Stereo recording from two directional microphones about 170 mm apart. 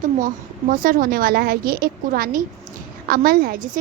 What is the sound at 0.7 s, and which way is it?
A woman's voice, 55° right (ahead or behind).